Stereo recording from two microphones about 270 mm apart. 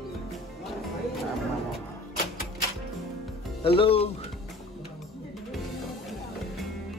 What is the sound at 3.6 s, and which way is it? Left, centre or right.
Speech, centre.